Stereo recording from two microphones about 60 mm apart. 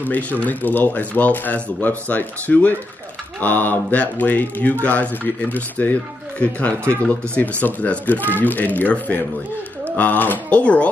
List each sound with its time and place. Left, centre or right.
0.0 s speech: left
7.1 s speech: left
10.6 s speech: left